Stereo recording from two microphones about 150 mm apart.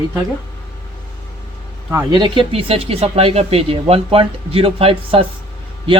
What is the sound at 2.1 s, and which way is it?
A man's voice, 30° right (ahead or behind).